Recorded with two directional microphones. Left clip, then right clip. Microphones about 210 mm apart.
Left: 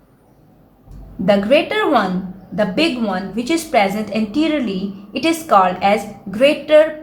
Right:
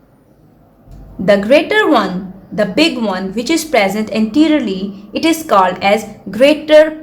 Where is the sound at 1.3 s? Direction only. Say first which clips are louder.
Right 4 dB; 30° right (ahead or behind).